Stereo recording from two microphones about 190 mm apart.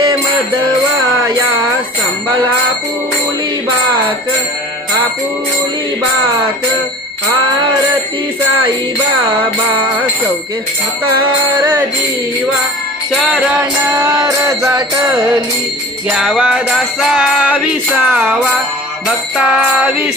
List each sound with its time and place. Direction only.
13.1 s music: centre (ahead or behind)
13.8 s music: 15° right (ahead or behind)
16.1 s music: 5° right (ahead or behind)